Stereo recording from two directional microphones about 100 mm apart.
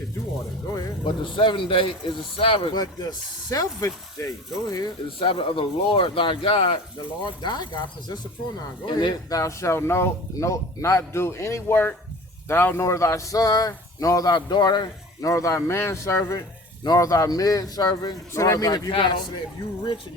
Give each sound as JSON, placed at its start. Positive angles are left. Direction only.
{"t": 0.7, "sound": "speech", "side_deg": 30}
{"t": 1.0, "sound": "a man's voice", "side_deg": 55}
{"t": 2.7, "sound": "speech", "side_deg": 40}
{"t": 5.2, "sound": "a man's voice", "side_deg": 60}
{"t": 7.4, "sound": "speech", "side_deg": 45}
{"t": 9.4, "sound": "speech", "side_deg": 30}
{"t": 15.2, "sound": "speech", "side_deg": 30}
{"t": 16.8, "sound": "speech", "side_deg": 40}
{"t": 18.9, "sound": "a man's voice", "side_deg": 55}